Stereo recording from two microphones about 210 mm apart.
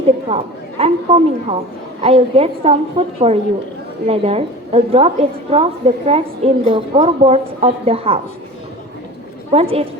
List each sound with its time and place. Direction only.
0.3 s a woman's voice: 30° right (ahead or behind)
9.5 s a woman's voice: 30° right (ahead or behind)